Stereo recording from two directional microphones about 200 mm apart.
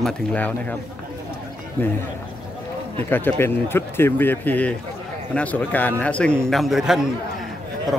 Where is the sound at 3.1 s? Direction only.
10° left (ahead or behind).